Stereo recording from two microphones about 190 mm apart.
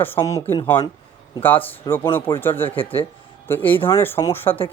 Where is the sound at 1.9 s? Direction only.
10° left (ahead or behind).